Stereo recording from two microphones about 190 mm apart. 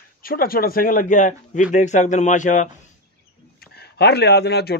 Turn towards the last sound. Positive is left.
turn(degrees=60)  # may be behind; listen again after turning